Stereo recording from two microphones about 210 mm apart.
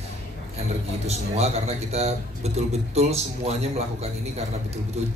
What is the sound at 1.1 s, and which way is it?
A man's voice, 30° right (ahead or behind).